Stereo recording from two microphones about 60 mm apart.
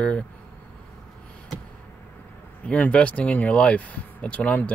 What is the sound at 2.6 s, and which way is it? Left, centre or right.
Speech, left.